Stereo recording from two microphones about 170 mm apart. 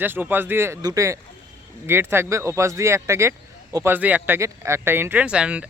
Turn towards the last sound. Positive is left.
turn(degrees=-5)  # may be behind; listen again after turning